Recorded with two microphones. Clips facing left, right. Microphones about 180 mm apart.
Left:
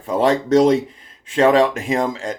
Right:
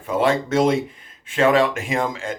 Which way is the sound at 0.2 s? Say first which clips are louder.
Left 4 dB; 40° left (ahead or behind).